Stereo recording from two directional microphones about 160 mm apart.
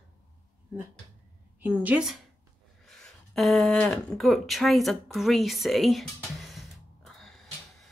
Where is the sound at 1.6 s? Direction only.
10° right (ahead or behind).